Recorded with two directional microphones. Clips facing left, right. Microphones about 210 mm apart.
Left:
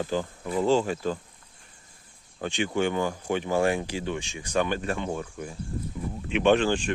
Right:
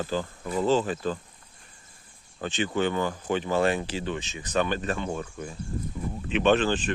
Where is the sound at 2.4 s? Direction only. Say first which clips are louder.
Even; 15° left (ahead or behind).